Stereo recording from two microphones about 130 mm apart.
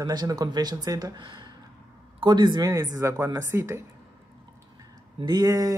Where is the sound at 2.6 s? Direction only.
25° right (ahead or behind).